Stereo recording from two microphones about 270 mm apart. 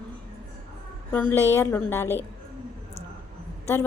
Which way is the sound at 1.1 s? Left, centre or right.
Centre.